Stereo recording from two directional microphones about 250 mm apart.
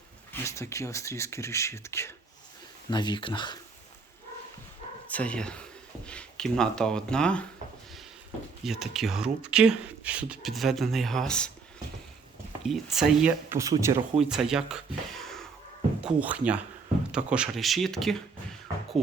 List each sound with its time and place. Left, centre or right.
0.4 s speech: centre
5.0 s speech: centre
8.6 s speech: centre
12.6 s speech: centre